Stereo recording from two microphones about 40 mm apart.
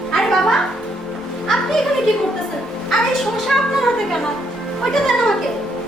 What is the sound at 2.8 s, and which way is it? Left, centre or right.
Speech, centre.